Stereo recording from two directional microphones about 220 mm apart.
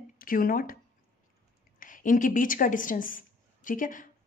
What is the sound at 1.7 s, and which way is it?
A woman's voice, 35° left (ahead or behind).